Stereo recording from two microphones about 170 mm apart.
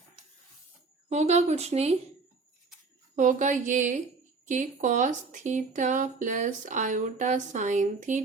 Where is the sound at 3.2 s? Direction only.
50° right (ahead or behind).